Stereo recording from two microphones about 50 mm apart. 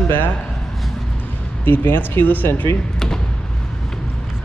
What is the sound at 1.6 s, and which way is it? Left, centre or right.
Speech, left.